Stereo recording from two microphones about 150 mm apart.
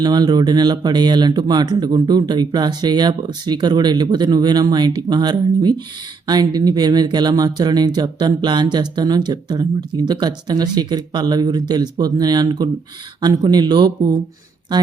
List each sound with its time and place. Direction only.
0.0 s speech: 25° right (ahead or behind)